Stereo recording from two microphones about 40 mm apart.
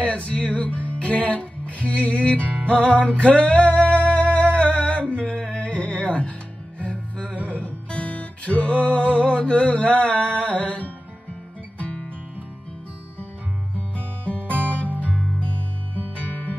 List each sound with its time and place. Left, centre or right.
0.0 s music: left
14.2 s music: left